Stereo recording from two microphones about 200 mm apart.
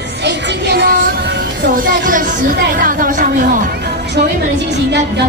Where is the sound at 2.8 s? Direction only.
45° right (ahead or behind).